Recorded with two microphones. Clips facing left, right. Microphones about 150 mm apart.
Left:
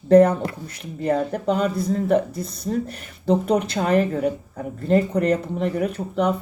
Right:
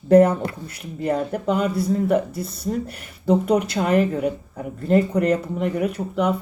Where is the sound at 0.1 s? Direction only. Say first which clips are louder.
Even; 30° left (ahead or behind).